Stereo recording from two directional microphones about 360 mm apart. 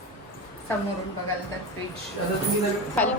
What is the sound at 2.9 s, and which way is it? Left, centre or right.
Speech, centre.